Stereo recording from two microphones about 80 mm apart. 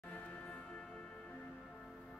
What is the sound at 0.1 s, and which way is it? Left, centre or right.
Music, centre.